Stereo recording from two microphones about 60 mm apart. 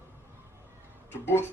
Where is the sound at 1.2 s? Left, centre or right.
Left.